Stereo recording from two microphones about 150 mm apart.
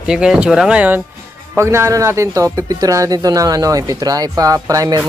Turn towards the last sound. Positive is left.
turn(degrees=-25)  # may be behind; listen again after turning